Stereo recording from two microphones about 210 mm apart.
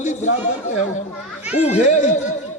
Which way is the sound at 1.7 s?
35° left (ahead or behind).